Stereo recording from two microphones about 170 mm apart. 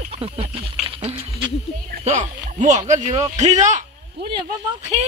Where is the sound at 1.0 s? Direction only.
35° right (ahead or behind).